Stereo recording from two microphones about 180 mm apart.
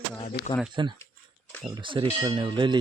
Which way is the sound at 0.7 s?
25° right (ahead or behind).